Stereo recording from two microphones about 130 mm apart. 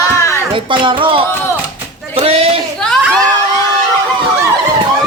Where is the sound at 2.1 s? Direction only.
50° right (ahead or behind).